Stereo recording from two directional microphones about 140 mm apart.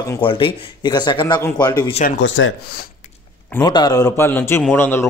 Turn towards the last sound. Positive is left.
turn(degrees=15)  # may be behind; listen again after turning